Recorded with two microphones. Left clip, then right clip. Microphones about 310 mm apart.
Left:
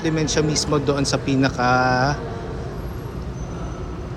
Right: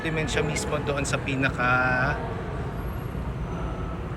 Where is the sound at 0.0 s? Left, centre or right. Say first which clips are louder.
Left 6 dB; centre.